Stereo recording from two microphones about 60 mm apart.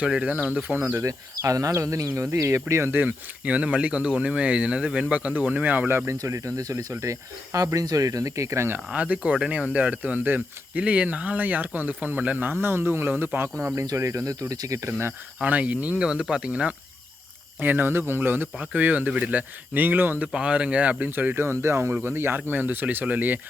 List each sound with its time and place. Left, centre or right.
0.0 s speech: centre
1.0 s speech: right
2.6 s speech: right
2.9 s speech: right
6.2 s speech: right
8.9 s speech: centre
13.8 s speech: right
15.4 s speech: right
16.0 s speech: centre
17.6 s speech: right
20.2 s speech: centre
21.3 s speech: right